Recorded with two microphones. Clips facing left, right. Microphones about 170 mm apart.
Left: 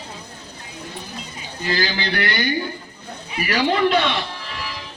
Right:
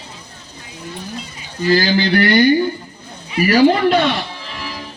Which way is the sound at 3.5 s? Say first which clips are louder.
Right 6 dB; 40° right (ahead or behind).